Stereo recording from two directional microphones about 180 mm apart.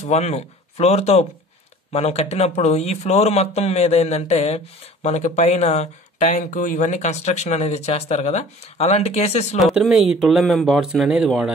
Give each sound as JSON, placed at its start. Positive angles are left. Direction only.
{"t": 0.0, "sound": "speech", "side_deg": 35}
{"t": 9.6, "sound": "speech", "side_deg": 0}